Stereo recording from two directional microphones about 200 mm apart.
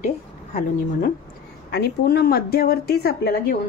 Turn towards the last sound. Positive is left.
turn(degrees=55)  # may be behind; listen again after turning